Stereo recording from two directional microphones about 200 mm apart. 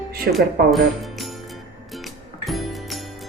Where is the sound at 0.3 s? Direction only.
50° right (ahead or behind).